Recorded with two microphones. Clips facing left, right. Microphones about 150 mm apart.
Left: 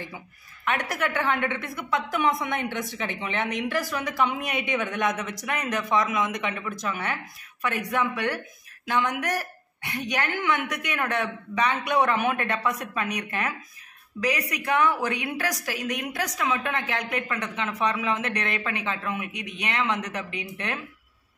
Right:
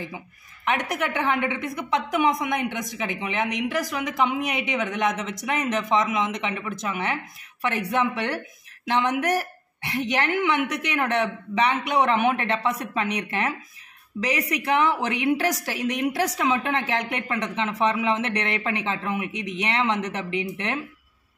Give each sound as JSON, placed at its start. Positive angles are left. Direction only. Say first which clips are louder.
{"t": 0.7, "sound": "a woman's voice", "louder": "right 2 dB", "side_deg": -20}